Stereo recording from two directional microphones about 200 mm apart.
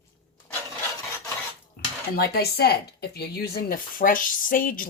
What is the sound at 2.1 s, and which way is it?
Speech, 50° left (ahead or behind).